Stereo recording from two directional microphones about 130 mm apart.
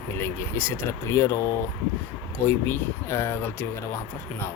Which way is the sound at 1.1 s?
20° left (ahead or behind).